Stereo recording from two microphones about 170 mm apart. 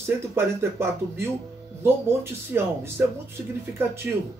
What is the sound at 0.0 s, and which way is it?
Speech, 15° right (ahead or behind).